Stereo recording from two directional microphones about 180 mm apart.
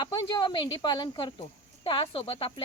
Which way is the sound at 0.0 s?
25° left (ahead or behind).